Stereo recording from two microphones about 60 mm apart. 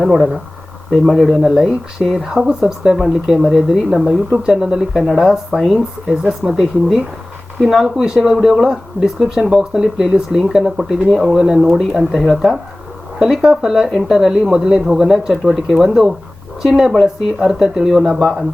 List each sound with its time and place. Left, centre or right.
0.0 s speech: centre
7.9 s speech: centre
11.7 s speech: centre